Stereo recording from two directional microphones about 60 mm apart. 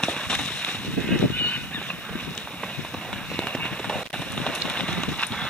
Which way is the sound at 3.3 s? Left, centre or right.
Centre.